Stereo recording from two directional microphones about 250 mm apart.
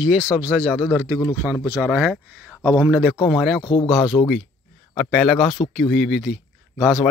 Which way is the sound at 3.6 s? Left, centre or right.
Centre.